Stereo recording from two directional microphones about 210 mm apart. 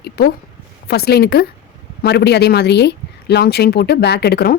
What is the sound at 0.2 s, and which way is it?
Speech, 50° left (ahead or behind).